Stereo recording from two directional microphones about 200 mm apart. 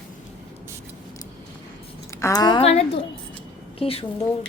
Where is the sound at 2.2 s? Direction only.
15° left (ahead or behind).